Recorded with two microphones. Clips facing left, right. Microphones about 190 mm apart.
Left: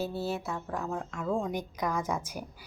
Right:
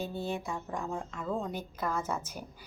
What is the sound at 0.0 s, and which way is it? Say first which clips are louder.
Music: left 2 dB; 5° left (ahead or behind).